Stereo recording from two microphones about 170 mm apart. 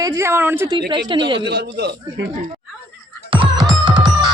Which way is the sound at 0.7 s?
30° right (ahead or behind).